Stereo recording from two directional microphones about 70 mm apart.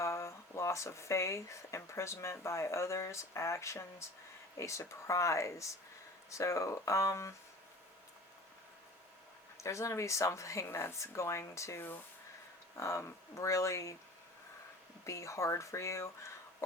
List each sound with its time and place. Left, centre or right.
0.0 s speech: left
9.6 s speech: left
15.0 s speech: left